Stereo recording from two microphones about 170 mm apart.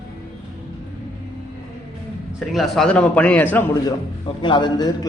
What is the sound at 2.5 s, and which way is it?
A man's voice, centre (ahead or behind).